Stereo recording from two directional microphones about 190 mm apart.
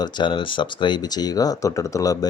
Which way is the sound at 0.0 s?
25° left (ahead or behind).